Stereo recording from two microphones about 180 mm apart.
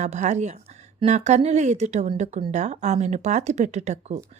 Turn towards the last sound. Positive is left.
turn(degrees=-40)  # may be behind; listen again after turning